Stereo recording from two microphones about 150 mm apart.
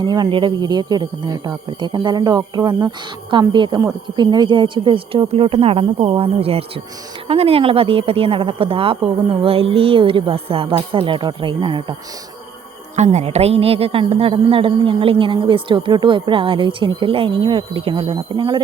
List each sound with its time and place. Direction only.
0.0 s a woman's voice: 25° right (ahead or behind)
13.0 s a woman's voice: 45° right (ahead or behind)